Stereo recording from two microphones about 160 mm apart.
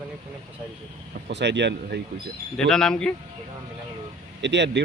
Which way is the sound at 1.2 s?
90° right.